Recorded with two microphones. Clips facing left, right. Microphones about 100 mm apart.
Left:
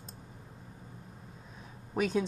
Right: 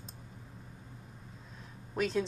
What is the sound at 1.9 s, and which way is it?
Speech, 5° left (ahead or behind).